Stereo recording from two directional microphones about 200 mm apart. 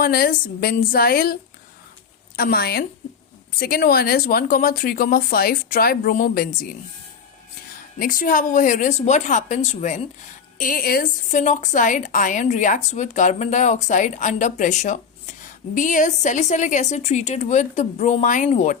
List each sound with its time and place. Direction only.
0.0 s speech: 50° left (ahead or behind)
7.9 s a woman's voice: 45° left (ahead or behind)